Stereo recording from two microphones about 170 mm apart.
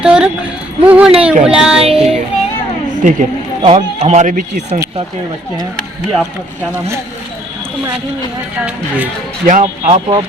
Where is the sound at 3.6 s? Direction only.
35° right (ahead or behind).